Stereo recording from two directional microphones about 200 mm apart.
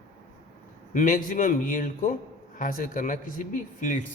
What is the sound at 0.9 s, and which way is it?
A man's voice, 40° left (ahead or behind).